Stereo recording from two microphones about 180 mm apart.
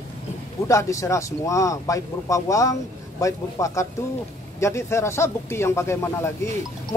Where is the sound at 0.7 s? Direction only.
15° left (ahead or behind).